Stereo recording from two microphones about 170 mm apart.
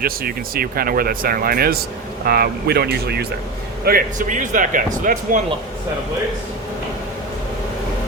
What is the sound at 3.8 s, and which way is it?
Speech, 60° right (ahead or behind).